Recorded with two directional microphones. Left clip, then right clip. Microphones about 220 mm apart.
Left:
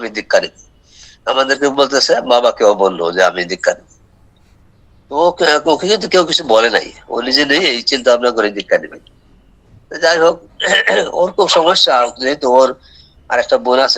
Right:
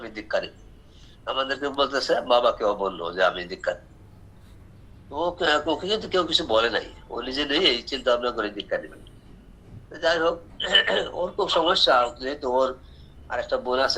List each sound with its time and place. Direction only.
0.0 s a man's voice: 60° left (ahead or behind)
5.0 s a man's voice: 55° left (ahead or behind)